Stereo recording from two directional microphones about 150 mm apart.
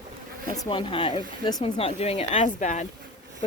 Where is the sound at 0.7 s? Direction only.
35° left (ahead or behind).